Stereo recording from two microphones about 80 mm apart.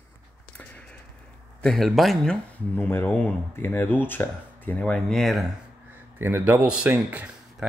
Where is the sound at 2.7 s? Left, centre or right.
Left.